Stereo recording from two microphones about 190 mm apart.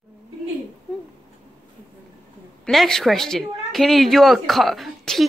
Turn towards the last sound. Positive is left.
turn(degrees=0)  # may be behind; listen again after turning